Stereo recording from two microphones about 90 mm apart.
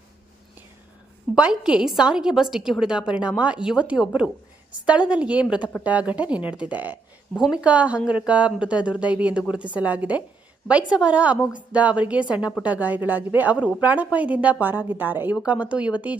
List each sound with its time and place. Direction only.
1.4 s a woman's voice: 10° right (ahead or behind)
7.3 s a woman's voice: 5° right (ahead or behind)